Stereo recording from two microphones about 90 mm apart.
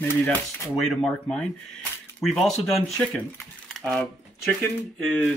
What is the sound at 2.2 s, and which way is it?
Speech, centre (ahead or behind).